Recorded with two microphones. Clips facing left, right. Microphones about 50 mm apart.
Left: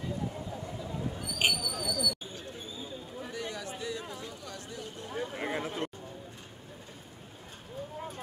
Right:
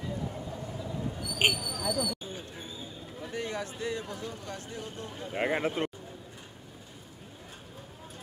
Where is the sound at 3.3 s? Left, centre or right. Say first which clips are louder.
Right 4 dB; right.